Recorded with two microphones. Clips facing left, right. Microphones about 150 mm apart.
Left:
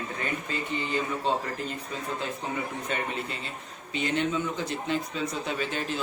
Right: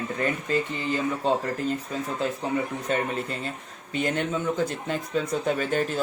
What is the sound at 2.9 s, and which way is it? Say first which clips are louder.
Speech: right 7 dB; 35° right (ahead or behind).